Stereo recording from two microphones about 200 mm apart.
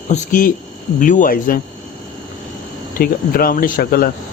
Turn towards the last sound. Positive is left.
turn(degrees=45)  # may be behind; listen again after turning